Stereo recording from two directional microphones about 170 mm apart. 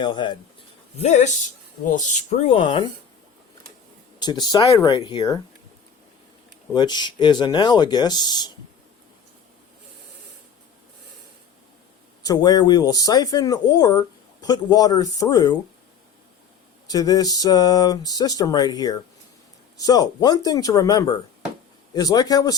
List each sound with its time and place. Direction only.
0.0 s speech: 25° left (ahead or behind)
0.9 s speech: 40° left (ahead or behind)
2.5 s speech: 30° left (ahead or behind)
4.2 s speech: 25° left (ahead or behind)
6.7 s speech: 25° left (ahead or behind)
12.2 s speech: 20° left (ahead or behind)
16.8 s speech: 20° left (ahead or behind)